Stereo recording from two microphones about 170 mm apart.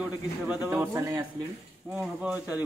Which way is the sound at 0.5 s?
10° right (ahead or behind).